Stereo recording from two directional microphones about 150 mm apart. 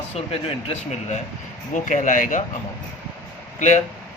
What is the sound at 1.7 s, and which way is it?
Speech, 55° left (ahead or behind).